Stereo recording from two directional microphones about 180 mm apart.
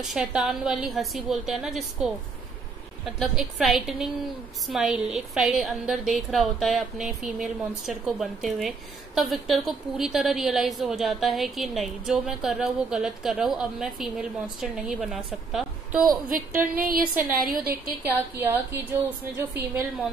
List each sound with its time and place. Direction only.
0.0 s a woman's voice: 5° right (ahead or behind)
3.2 s a woman's voice: centre (ahead or behind)
16.3 s a woman's voice: 50° right (ahead or behind)
18.0 s a woman's voice: 10° right (ahead or behind)